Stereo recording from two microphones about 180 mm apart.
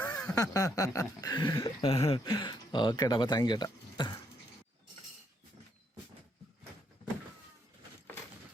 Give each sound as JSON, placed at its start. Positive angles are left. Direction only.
{"t": 0.0, "sound": "a sound", "side_deg": 5}
{"t": 0.5, "sound": "speech", "side_deg": 20}
{"t": 1.9, "sound": "speech", "side_deg": 35}